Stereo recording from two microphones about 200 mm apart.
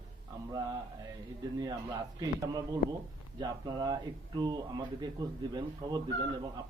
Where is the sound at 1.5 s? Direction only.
20° right (ahead or behind).